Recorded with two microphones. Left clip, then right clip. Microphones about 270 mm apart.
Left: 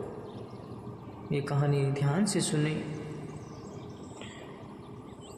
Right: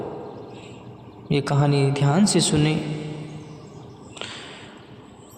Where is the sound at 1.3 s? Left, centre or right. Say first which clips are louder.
Right 9 dB; right.